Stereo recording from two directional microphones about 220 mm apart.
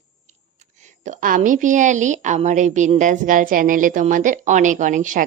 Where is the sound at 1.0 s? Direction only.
35° right (ahead or behind).